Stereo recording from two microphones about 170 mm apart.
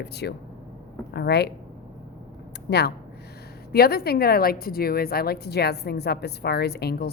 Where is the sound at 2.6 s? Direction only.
70° left (ahead or behind).